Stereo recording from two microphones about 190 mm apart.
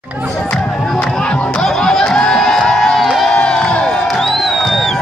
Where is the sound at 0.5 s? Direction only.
10° left (ahead or behind).